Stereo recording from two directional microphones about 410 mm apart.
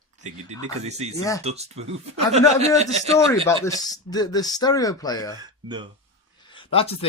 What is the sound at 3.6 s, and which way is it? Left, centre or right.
Speech, centre.